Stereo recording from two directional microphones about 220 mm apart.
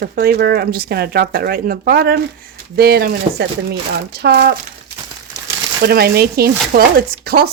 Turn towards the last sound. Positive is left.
turn(degrees=-45)  # may be behind; listen again after turning